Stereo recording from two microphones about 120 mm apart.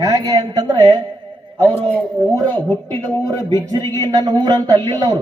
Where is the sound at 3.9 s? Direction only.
35° right (ahead or behind).